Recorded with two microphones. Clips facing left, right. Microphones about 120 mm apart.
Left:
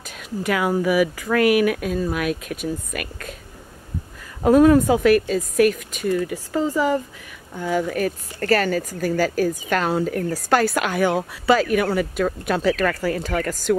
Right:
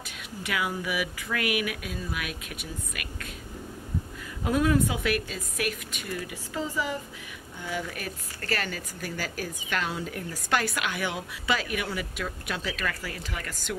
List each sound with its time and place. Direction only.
0.2 s a woman's voice: 45° left (ahead or behind)
4.5 s a woman's voice: 45° left (ahead or behind)